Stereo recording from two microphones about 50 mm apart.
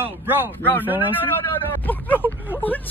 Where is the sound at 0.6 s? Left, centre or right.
Left.